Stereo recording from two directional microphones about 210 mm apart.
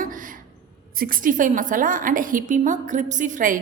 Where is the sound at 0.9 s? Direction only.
40° right (ahead or behind).